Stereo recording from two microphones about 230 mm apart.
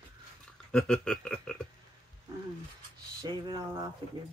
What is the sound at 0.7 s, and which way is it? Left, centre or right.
Speech, centre.